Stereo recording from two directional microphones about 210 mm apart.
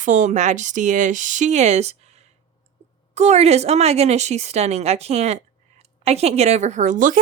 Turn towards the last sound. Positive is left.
turn(degrees=-40)  # may be behind; listen again after turning